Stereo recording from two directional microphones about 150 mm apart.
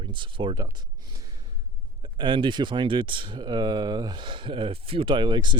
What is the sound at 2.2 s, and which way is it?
Speech, 35° right (ahead or behind).